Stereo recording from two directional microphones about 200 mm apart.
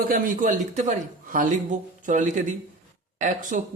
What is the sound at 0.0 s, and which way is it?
A woman's voice, 45° right (ahead or behind).